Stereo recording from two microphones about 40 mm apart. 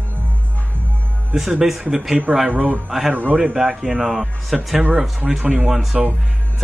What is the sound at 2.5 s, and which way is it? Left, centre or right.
Speech, right.